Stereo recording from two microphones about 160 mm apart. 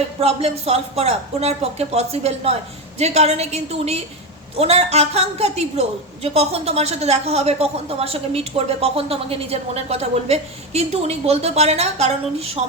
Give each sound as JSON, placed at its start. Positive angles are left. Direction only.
{"t": 0.2, "sound": "a woman's voice", "side_deg": -40}